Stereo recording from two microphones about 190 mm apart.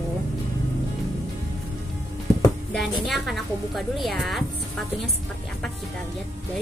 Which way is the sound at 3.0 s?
Centre (ahead or behind).